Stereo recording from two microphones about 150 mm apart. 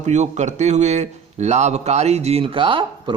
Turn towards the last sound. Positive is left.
turn(degrees=-35)  # may be behind; listen again after turning